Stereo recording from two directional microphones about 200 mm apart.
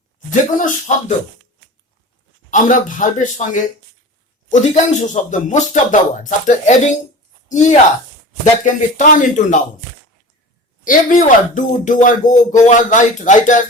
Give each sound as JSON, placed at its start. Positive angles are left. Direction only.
{"t": 0.3, "sound": "speech", "side_deg": 40}
{"t": 2.5, "sound": "speech", "side_deg": 40}
{"t": 10.8, "sound": "speech", "side_deg": 40}